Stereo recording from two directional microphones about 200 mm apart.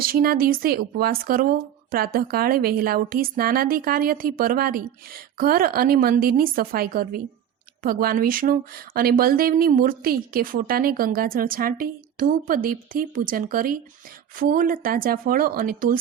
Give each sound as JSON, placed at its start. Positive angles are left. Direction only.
{"t": 0.0, "sound": "speech", "side_deg": -45}